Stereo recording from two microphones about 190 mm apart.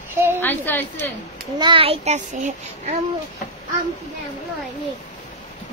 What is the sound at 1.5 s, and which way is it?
A child's voice, 25° right (ahead or behind).